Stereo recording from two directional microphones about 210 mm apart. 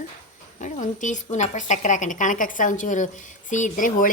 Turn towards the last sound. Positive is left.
turn(degrees=40)  # may be behind; listen again after turning